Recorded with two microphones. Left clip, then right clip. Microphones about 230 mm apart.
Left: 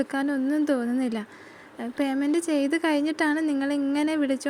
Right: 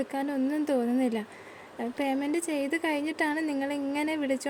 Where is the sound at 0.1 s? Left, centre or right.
Centre.